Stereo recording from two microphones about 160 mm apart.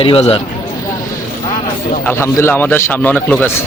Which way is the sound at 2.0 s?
15° left (ahead or behind).